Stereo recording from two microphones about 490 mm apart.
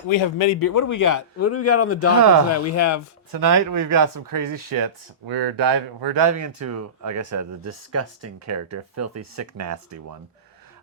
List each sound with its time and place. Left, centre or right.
0.1 s speech: left
0.6 s speech: left
3.4 s speech: right